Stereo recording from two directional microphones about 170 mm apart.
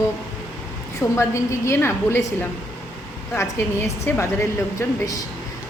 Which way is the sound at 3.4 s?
15° left (ahead or behind).